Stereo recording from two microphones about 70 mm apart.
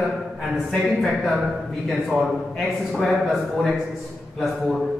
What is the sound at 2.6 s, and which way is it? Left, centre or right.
A man's voice, centre.